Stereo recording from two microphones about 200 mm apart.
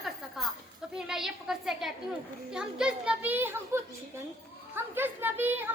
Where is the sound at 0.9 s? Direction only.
5° right (ahead or behind).